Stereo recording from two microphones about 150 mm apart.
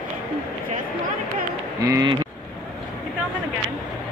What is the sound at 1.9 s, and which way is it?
Speech, 25° right (ahead or behind).